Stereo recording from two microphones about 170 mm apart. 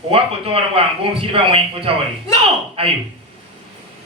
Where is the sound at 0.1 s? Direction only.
35° right (ahead or behind).